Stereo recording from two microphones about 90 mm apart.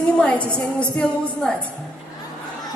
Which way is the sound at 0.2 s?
15° left (ahead or behind).